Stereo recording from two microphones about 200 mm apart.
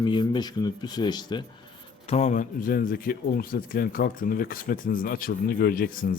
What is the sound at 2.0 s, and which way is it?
A man's voice, 35° left (ahead or behind).